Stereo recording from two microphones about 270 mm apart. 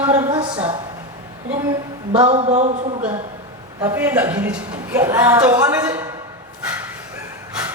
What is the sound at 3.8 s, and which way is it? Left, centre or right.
A man's voice, centre.